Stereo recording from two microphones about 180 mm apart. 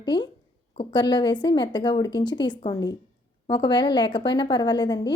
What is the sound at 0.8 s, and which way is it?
A woman's voice, 25° left (ahead or behind).